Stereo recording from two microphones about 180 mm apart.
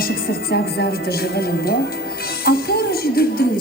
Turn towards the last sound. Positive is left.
turn(degrees=55)  # may be behind; listen again after turning